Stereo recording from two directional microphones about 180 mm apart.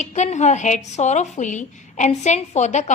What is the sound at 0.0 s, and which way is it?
A woman's voice, 40° left (ahead or behind).